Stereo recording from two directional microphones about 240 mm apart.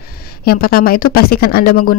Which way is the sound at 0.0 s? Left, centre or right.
Left.